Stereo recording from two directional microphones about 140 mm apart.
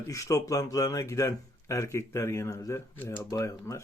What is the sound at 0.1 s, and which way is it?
Speech, 25° left (ahead or behind).